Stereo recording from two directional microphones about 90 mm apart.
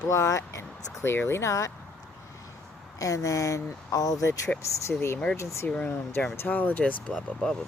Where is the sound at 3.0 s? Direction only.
40° left (ahead or behind).